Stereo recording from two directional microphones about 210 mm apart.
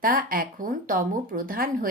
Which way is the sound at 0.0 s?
45° right (ahead or behind).